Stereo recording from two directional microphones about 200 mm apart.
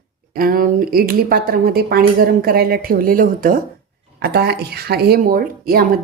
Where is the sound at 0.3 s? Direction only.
45° right (ahead or behind).